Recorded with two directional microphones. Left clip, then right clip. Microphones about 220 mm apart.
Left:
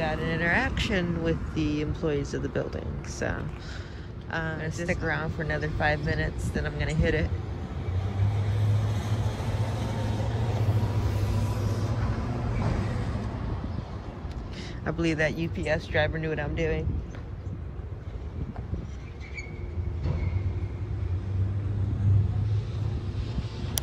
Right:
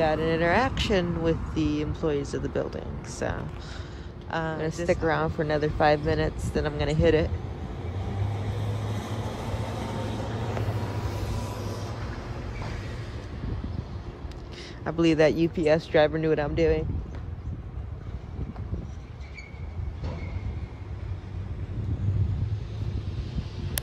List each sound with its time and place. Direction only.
0.0 s speech: 20° right (ahead or behind)
7.6 s vehicle: 45° right (ahead or behind)
12.8 s vehicle: 20° left (ahead or behind)
14.9 s speech: 15° right (ahead or behind)